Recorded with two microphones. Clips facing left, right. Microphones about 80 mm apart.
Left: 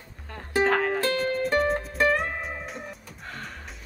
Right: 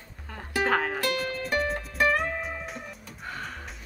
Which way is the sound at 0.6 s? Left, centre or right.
Centre.